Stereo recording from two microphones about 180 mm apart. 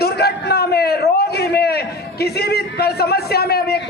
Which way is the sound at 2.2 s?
60° left (ahead or behind).